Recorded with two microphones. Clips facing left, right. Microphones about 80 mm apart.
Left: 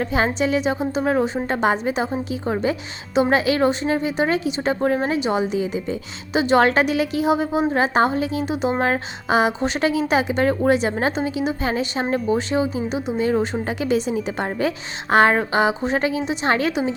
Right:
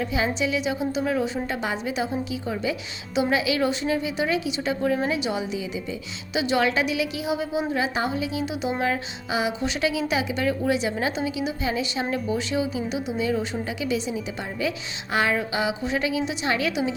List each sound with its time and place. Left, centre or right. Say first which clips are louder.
0.0 s a woman's voice: left 4 dB; left